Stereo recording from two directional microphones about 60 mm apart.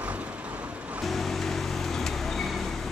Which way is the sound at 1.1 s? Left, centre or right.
Centre.